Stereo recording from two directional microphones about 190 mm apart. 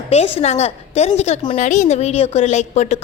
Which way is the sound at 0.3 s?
35° left (ahead or behind).